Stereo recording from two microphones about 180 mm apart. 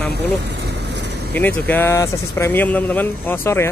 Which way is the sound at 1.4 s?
10° left (ahead or behind).